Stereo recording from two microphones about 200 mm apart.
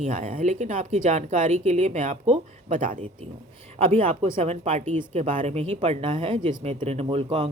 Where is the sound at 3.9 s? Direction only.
30° right (ahead or behind).